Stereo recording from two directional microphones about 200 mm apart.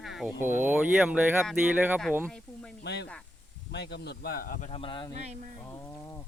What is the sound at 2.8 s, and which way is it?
Speech, 60° left (ahead or behind).